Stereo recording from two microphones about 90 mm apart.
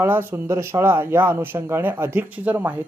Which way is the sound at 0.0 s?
25° right (ahead or behind).